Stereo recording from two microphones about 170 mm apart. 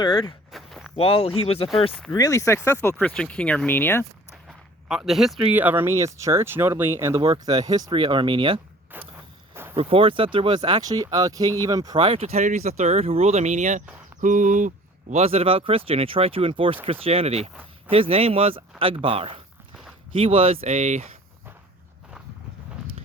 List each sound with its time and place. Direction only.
0.0 s speech: 30° left (ahead or behind)
0.5 s walk: centre (ahead or behind)
0.9 s speech: 35° left (ahead or behind)
2.0 s speech: 20° left (ahead or behind)
4.4 s speech: 5° right (ahead or behind); by 8.6 s 30° right (ahead or behind)
8.9 s speech: 10° right (ahead or behind)
9.7 s speech: 30° right (ahead or behind)
11.9 s speech: 35° right (ahead or behind)
14.2 s a sound: 50° right (ahead or behind)
15.1 s speech: 35° right (ahead or behind)